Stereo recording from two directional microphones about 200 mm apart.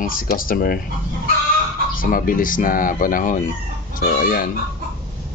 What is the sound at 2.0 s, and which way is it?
Speech, 45° left (ahead or behind).